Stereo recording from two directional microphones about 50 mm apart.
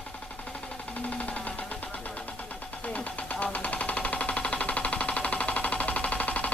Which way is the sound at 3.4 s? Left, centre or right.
Left.